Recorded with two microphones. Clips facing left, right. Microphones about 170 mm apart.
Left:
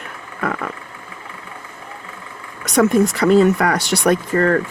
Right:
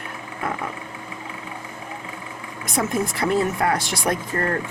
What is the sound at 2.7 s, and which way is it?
Speech, 75° left (ahead or behind).